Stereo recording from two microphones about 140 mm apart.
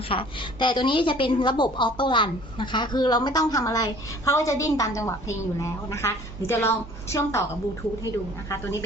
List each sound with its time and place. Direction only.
0.1 s a woman's voice: 40° left (ahead or behind); by 7.4 s 20° left (ahead or behind)